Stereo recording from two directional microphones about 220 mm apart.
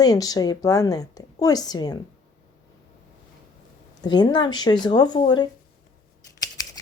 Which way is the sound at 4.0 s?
20° left (ahead or behind).